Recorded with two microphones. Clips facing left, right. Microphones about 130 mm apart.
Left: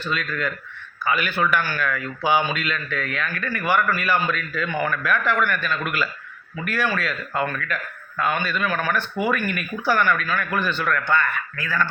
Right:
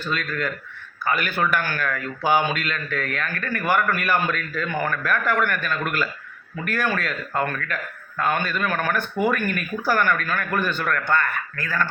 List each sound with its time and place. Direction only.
0.0 s speech: 45° right (ahead or behind)
8.2 s speech: 45° right (ahead or behind)